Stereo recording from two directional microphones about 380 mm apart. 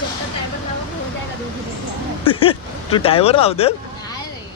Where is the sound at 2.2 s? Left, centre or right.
Centre.